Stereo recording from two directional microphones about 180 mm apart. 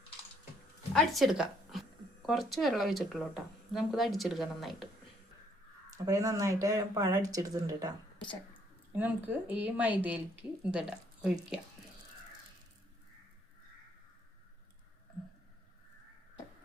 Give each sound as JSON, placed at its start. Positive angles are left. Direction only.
{"t": 0.9, "sound": "speech", "side_deg": 0}
{"t": 5.9, "sound": "speech", "side_deg": -20}
{"t": 8.9, "sound": "a woman's voice", "side_deg": -10}